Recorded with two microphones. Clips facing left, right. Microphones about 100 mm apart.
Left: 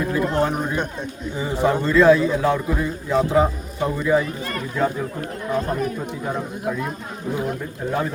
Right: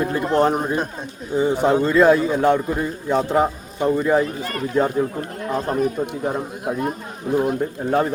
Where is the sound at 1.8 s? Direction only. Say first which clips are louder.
Left 2 dB; 45° right (ahead or behind).